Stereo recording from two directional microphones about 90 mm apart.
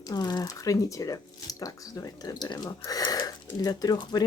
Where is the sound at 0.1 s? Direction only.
50° left (ahead or behind).